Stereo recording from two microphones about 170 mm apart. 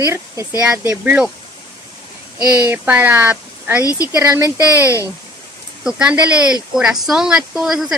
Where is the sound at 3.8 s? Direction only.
20° left (ahead or behind).